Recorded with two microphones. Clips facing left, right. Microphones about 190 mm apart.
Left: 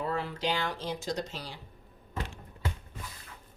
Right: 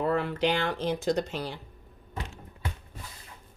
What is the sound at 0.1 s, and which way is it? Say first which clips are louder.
Speech: right 5 dB; 60° right (ahead or behind).